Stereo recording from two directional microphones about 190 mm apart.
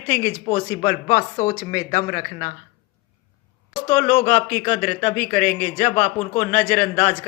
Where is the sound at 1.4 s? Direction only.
15° left (ahead or behind).